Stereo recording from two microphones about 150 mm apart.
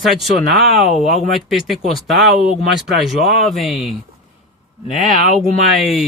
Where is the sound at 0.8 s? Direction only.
45° left (ahead or behind).